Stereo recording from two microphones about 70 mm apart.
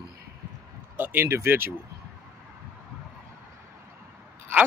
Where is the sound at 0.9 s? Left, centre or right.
Right.